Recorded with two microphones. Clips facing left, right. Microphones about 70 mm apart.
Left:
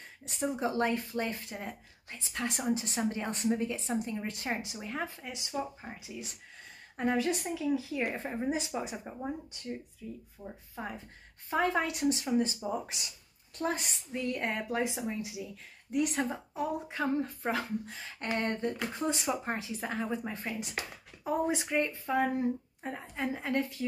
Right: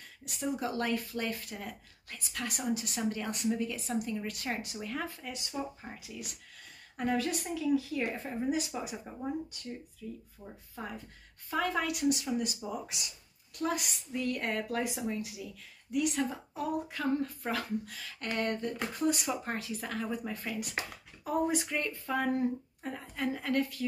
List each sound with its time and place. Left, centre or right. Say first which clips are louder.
0.2 s speech: left 2 dB; left
15.9 s speech: even; left